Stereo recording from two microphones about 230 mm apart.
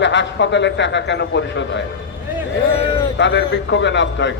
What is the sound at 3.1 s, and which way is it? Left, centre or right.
A man's voice, left.